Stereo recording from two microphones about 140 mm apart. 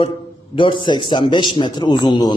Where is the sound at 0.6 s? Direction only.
35° left (ahead or behind).